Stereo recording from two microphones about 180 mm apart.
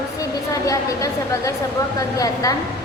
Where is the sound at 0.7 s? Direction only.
20° left (ahead or behind).